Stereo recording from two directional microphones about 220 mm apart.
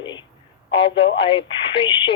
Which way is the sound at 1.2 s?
25° left (ahead or behind).